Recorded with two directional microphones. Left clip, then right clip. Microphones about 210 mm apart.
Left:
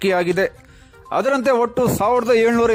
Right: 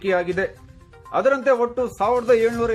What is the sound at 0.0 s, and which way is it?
Speech, 50° left (ahead or behind).